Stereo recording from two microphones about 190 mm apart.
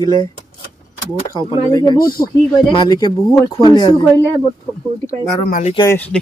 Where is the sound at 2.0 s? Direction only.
50° left (ahead or behind).